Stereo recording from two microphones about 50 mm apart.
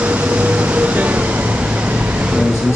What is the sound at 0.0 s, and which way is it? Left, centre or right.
Vehicle, right.